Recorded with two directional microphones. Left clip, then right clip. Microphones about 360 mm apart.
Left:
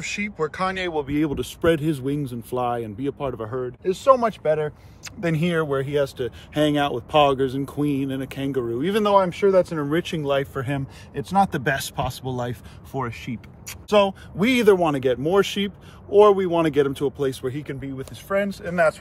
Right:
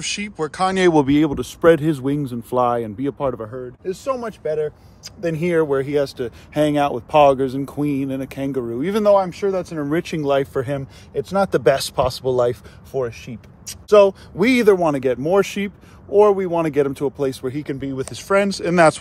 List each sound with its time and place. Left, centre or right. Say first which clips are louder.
0.0 s speech: right 1 dB; centre
0.7 s speech: right 10 dB; right
1.1 s speech: right 6 dB; centre
3.5 s speech: left 2 dB; centre
13.8 s speech: right 6 dB; centre